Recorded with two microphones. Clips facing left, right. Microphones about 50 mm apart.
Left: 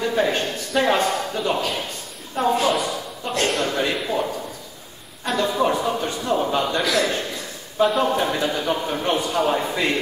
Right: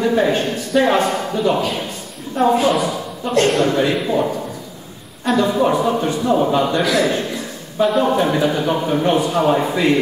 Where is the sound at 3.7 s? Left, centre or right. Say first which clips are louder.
Right 6 dB; centre.